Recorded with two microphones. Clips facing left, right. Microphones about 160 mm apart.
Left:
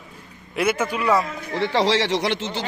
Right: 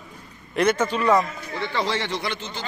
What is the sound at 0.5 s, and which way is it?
Speech, 10° left (ahead or behind).